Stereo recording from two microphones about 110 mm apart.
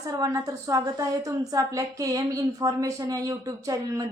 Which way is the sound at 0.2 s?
30° right (ahead or behind).